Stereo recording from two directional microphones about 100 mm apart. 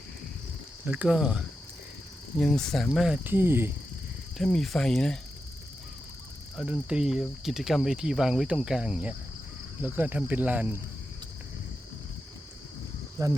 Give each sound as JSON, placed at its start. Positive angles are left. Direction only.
{"t": 0.9, "sound": "speech", "side_deg": -10}
{"t": 2.4, "sound": "speech", "side_deg": 5}
{"t": 2.9, "sound": "speech", "side_deg": -5}
{"t": 3.2, "sound": "cricket", "side_deg": -20}
{"t": 4.4, "sound": "speech", "side_deg": 5}
{"t": 6.7, "sound": "speech", "side_deg": -10}
{"t": 13.2, "sound": "speech", "side_deg": -35}